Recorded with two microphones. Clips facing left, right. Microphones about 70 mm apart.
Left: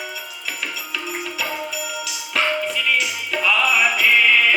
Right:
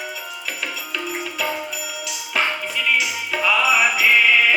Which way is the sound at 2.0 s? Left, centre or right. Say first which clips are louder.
Even; centre.